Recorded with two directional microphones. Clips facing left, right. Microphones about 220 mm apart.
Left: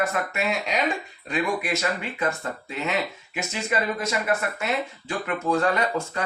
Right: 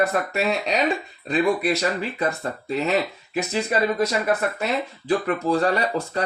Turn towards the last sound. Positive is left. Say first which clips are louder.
# right 2 dB
turn(degrees=-35)  # may be behind; listen again after turning